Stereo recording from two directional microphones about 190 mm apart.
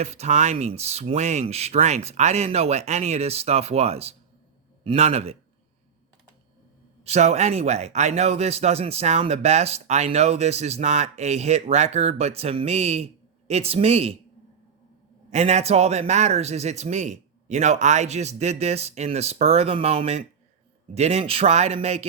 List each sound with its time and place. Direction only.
0.0 s a man's voice: 35° right (ahead or behind)
7.0 s a man's voice: 35° right (ahead or behind)
15.3 s a man's voice: 35° right (ahead or behind)